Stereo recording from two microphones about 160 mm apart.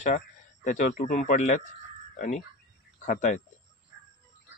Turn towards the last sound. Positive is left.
turn(degrees=50)  # may be behind; listen again after turning